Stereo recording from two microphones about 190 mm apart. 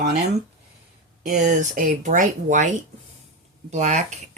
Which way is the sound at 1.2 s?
40° right (ahead or behind).